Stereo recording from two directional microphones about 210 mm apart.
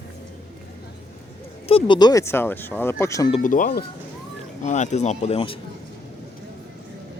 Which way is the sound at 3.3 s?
40° left (ahead or behind).